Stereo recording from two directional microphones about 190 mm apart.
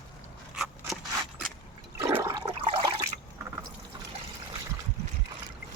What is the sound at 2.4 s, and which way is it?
Toilet flush, 25° right (ahead or behind).